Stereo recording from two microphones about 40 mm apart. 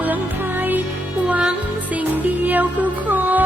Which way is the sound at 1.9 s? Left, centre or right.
Right.